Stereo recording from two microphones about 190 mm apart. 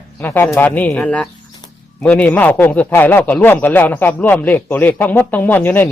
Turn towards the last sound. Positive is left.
turn(degrees=10)  # may be behind; listen again after turning